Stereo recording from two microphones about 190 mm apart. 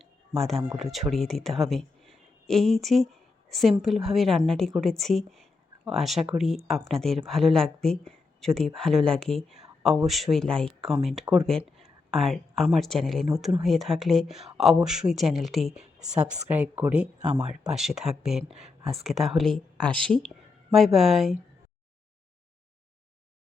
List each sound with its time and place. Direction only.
0.0 s speech: centre (ahead or behind)